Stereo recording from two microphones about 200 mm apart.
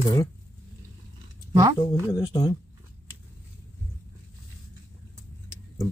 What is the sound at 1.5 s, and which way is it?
Speech, 20° right (ahead or behind).